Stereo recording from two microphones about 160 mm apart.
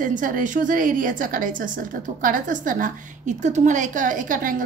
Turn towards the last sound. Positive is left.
turn(degrees=-55)  # may be behind; listen again after turning